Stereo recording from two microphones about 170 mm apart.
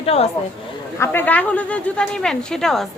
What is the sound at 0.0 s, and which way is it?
Speech, 35° left (ahead or behind).